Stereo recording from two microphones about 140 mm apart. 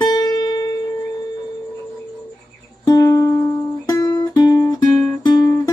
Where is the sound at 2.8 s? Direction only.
25° left (ahead or behind).